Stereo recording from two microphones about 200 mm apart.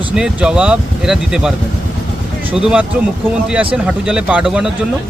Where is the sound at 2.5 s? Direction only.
5° right (ahead or behind).